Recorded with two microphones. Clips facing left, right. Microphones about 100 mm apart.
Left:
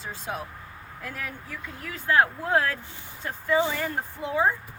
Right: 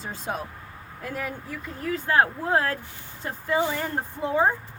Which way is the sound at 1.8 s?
35° right (ahead or behind).